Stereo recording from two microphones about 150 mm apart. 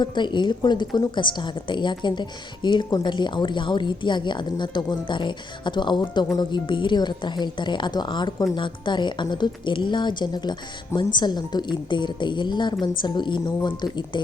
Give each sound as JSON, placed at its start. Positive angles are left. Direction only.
{"t": 0.0, "sound": "a woman's voice", "side_deg": 30}